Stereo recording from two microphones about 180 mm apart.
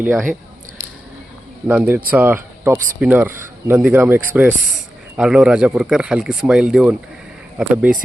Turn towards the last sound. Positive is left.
turn(degrees=-5)  # may be behind; listen again after turning